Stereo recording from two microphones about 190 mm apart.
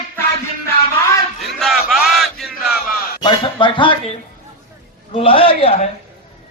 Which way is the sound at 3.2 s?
25° left (ahead or behind).